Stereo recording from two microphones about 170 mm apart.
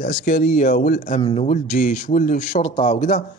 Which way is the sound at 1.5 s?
50° left (ahead or behind).